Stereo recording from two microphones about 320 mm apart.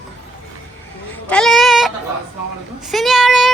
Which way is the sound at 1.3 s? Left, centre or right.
Centre.